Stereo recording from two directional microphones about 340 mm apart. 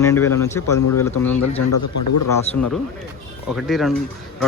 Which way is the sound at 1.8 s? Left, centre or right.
Left.